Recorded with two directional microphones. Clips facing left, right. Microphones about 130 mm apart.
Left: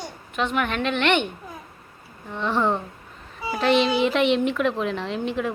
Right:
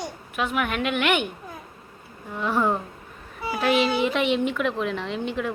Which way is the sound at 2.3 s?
5° right (ahead or behind).